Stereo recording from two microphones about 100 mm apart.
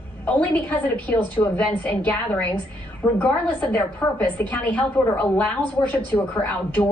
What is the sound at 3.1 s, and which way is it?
A woman's voice, 15° left (ahead or behind).